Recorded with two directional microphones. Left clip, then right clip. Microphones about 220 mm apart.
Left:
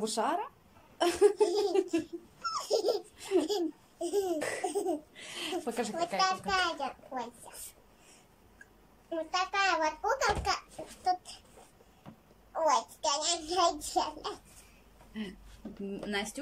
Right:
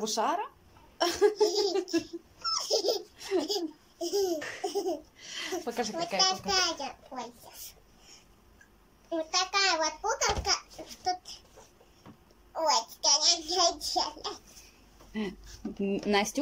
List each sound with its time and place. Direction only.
0.0 s babbling: centre (ahead or behind)
0.9 s dog: 5° left (ahead or behind)
4.4 s laughter: 20° left (ahead or behind)
5.3 s a woman's voice: 10° left (ahead or behind)
5.7 s babbling: centre (ahead or behind)
9.1 s babbling: 5° left (ahead or behind)
12.5 s babbling: centre (ahead or behind)
15.9 s speech: 20° right (ahead or behind)